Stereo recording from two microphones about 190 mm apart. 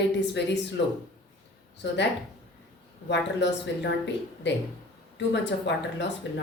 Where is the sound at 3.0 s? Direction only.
65° left (ahead or behind).